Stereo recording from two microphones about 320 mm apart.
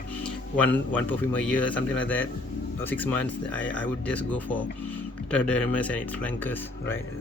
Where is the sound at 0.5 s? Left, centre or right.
Centre.